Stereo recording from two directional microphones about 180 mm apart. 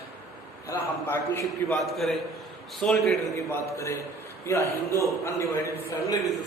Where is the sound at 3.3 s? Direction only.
15° left (ahead or behind).